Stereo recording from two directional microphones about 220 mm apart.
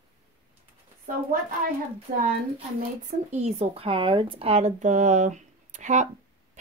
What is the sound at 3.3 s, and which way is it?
Speech, 30° right (ahead or behind).